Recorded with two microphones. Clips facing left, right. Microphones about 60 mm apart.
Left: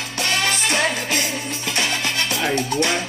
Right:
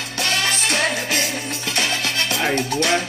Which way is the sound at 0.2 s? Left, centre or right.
Left.